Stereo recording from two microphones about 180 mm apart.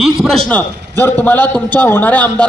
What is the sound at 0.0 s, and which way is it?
A man's voice, centre (ahead or behind).